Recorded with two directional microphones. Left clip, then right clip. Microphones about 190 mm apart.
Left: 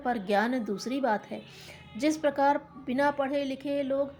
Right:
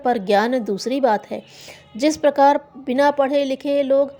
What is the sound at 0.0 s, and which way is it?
A woman's voice, 40° right (ahead or behind).